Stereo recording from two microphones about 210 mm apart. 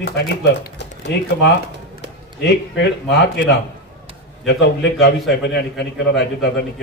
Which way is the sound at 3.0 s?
55° left (ahead or behind).